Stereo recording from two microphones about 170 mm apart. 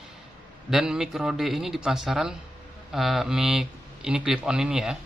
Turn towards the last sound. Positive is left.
turn(degrees=-5)  # may be behind; listen again after turning